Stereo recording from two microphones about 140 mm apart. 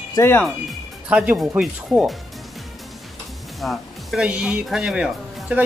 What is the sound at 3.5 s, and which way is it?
Speech, centre (ahead or behind).